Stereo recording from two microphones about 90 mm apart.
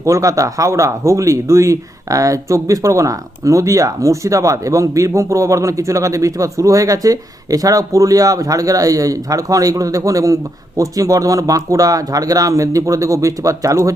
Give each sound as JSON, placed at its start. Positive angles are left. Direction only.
{"t": 0.0, "sound": "speech", "side_deg": -35}